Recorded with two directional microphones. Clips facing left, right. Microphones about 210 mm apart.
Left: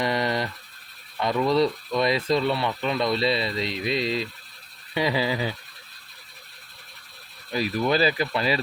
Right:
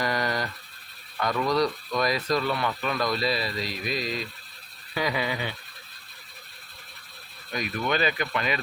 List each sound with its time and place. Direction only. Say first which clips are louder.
0.0 s a sound: left 3 dB; 25° left (ahead or behind)
1.2 s speech: left 3 dB; 25° left (ahead or behind)
7.5 s speech: left 5 dB; 35° left (ahead or behind)